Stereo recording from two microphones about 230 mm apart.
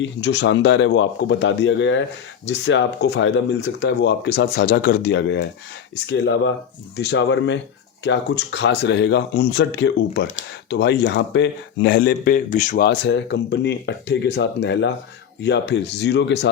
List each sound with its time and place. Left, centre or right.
0.0 s speech: left